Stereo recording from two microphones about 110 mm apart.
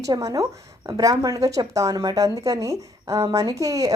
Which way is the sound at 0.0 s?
30° right (ahead or behind).